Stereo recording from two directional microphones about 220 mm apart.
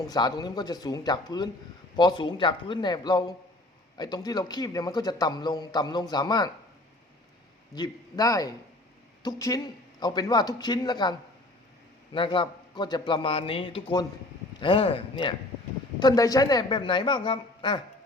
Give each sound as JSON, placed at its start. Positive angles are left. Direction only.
{"t": 0.1, "sound": "a man's voice", "side_deg": 20}
{"t": 7.8, "sound": "a man's voice", "side_deg": 15}
{"t": 12.1, "sound": "a man's voice", "side_deg": 20}